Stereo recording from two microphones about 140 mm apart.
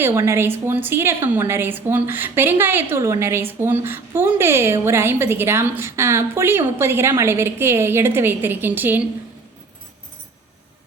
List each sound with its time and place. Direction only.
0.0 s a woman's voice: 20° right (ahead or behind)